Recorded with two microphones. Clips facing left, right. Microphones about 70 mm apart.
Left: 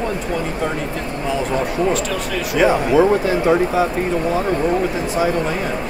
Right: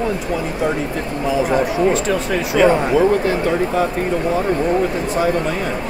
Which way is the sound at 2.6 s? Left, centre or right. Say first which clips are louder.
Even; centre.